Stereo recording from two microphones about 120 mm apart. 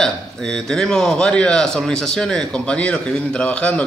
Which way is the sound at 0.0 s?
5° left (ahead or behind).